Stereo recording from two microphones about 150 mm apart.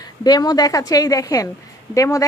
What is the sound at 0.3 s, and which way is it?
A woman's voice, 25° left (ahead or behind).